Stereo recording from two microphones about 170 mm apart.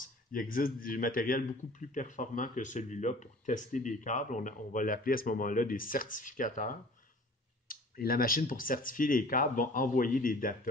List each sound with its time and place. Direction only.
0.0 s speech: 55° left (ahead or behind)